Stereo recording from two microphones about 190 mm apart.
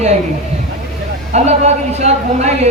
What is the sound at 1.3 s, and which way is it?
A woman's voice, 35° right (ahead or behind).